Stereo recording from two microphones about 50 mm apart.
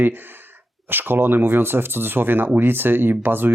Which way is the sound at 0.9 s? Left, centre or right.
Right.